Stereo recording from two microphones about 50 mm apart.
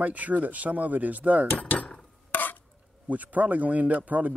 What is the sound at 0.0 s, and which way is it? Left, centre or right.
Speech, right.